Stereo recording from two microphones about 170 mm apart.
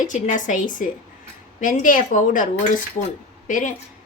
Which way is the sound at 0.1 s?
45° left (ahead or behind).